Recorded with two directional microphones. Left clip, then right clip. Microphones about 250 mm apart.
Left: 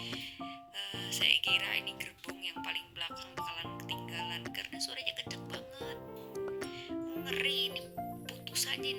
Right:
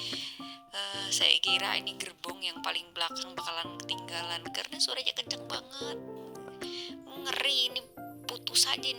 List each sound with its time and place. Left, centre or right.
0.8 s speech: right
2.4 s music: right